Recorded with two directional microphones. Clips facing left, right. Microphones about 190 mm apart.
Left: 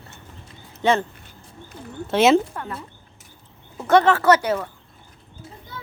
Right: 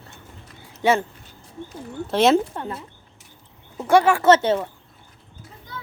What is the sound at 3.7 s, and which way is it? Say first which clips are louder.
Speech: even; 10° right (ahead or behind).